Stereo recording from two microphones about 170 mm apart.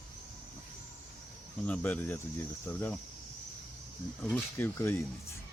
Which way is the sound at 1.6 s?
10° left (ahead or behind).